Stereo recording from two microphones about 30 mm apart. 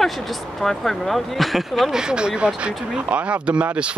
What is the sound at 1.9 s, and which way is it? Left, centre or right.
Speech, right.